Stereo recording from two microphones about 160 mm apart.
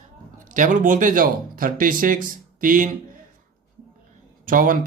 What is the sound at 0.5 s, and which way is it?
Speech, 55° right (ahead or behind).